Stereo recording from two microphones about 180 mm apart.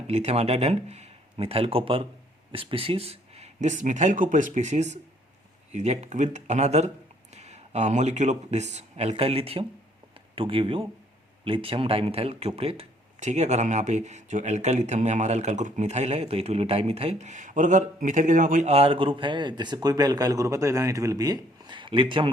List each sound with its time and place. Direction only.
0.1 s speech: 35° right (ahead or behind)